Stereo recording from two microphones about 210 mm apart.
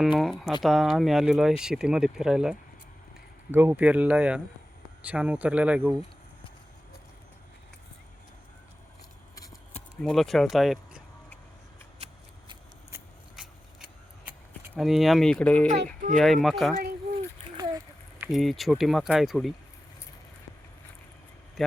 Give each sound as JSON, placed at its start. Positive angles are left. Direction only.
{"t": 0.0, "sound": "speech", "side_deg": 0}
{"t": 10.0, "sound": "speech", "side_deg": 0}
{"t": 13.3, "sound": "scissors", "side_deg": -5}
{"t": 14.7, "sound": "speech", "side_deg": 0}
{"t": 17.6, "sound": "a sound", "side_deg": -15}
{"t": 18.3, "sound": "speech", "side_deg": 0}